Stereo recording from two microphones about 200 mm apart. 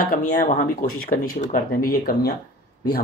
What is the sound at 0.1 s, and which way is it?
Speech, 40° left (ahead or behind).